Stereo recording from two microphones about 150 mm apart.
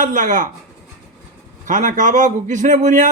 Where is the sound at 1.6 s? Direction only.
60° right (ahead or behind).